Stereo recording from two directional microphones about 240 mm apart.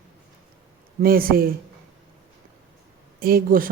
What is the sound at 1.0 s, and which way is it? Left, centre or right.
Speech, right.